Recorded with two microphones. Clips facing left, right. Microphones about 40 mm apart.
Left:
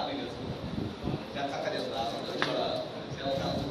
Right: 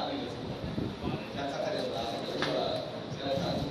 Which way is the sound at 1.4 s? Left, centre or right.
Left.